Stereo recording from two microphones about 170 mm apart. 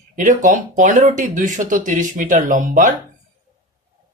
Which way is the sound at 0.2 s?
50° right (ahead or behind).